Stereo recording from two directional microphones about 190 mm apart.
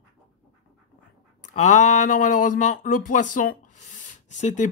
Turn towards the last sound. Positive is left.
turn(degrees=40)  # may be behind; listen again after turning